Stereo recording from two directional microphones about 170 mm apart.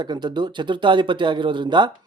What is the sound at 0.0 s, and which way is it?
Speech, 25° right (ahead or behind).